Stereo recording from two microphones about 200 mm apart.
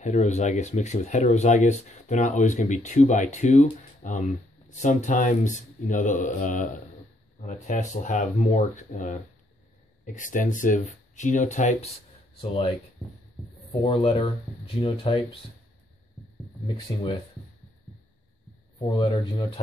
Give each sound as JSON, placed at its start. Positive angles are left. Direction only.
{"t": 0.0, "sound": "speech", "side_deg": 35}
{"t": 10.1, "sound": "speech", "side_deg": 40}
{"t": 16.6, "sound": "speech", "side_deg": 20}
{"t": 18.8, "sound": "speech", "side_deg": 25}